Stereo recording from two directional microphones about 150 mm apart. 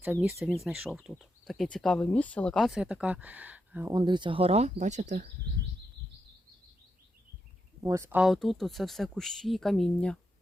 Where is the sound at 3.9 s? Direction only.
30° right (ahead or behind); by 5.2 s 55° right (ahead or behind).